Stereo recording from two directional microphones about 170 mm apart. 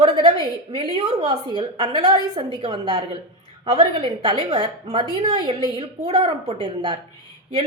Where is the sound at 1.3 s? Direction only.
25° right (ahead or behind).